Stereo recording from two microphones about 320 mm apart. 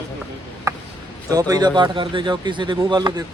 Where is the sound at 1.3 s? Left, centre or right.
Centre.